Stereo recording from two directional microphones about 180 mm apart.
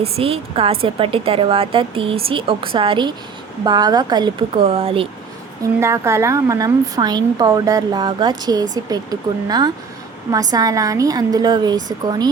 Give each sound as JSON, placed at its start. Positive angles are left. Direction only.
{"t": 0.0, "sound": "a woman's voice", "side_deg": -30}
{"t": 5.8, "sound": "a woman's voice", "side_deg": -15}